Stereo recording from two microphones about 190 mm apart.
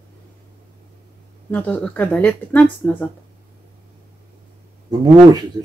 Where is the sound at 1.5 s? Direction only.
10° left (ahead or behind).